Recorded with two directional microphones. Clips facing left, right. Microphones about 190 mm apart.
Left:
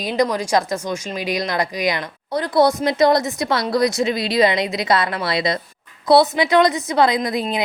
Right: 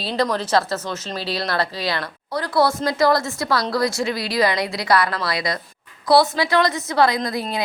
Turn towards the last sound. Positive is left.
turn(degrees=20)  # may be behind; listen again after turning